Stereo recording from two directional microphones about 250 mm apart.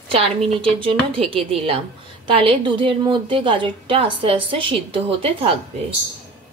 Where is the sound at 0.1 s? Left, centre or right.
Right.